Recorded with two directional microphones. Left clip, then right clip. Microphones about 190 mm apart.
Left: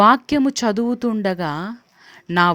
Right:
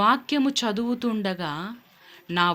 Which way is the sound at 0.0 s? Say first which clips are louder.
Left 7 dB; 50° left (ahead or behind).